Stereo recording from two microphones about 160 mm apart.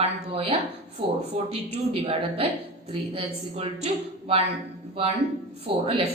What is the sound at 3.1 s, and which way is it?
A woman's voice, 40° right (ahead or behind).